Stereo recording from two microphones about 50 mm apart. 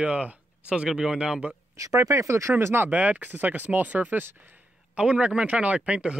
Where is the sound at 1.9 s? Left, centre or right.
Right.